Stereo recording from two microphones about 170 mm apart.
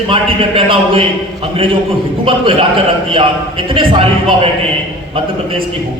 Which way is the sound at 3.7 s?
30° right (ahead or behind).